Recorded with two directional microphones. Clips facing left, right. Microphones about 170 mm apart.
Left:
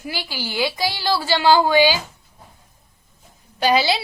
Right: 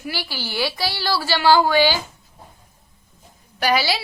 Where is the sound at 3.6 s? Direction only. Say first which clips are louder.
Left 2 dB; 20° left (ahead or behind).